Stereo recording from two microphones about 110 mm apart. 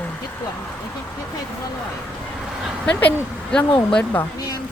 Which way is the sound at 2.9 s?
10° left (ahead or behind).